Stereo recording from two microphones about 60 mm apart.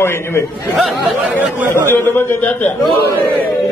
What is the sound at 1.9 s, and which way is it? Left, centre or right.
Speech, left.